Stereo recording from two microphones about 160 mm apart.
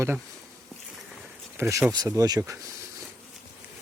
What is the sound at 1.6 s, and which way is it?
Speech, 15° right (ahead or behind).